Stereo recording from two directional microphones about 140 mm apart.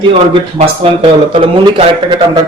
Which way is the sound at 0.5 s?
45° right (ahead or behind).